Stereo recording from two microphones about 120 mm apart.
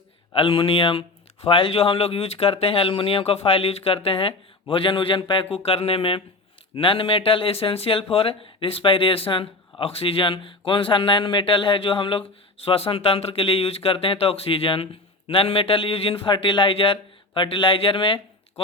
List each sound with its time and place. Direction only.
0.3 s speech: 50° left (ahead or behind)